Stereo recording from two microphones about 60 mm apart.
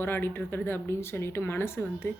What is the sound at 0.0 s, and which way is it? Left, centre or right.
A woman's voice, left.